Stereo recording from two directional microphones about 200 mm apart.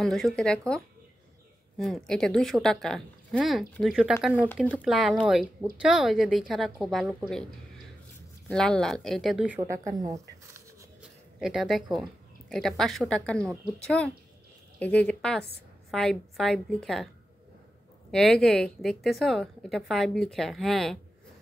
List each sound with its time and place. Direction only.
0.0 s a woman's voice: centre (ahead or behind)
8.5 s a woman's voice: 5° left (ahead or behind); by 10.2 s 15° right (ahead or behind)
11.0 s a woman's voice: 5° right (ahead or behind)
18.1 s a woman's voice: 5° left (ahead or behind)